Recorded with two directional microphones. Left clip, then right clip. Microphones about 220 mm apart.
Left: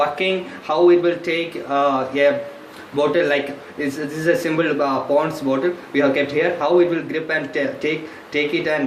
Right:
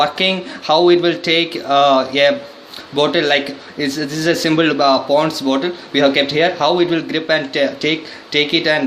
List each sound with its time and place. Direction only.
0.0 s speech: 60° right (ahead or behind)